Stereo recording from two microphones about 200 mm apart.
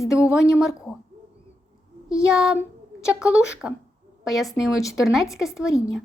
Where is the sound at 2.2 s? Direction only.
5° right (ahead or behind).